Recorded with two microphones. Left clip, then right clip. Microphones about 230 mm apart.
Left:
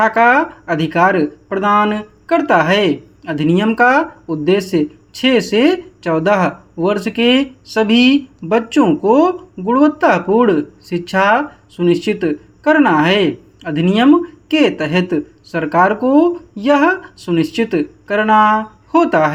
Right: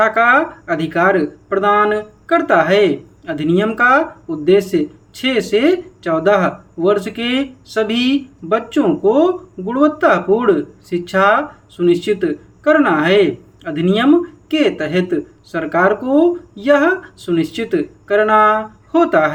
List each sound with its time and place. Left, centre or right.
0.0 s speech: left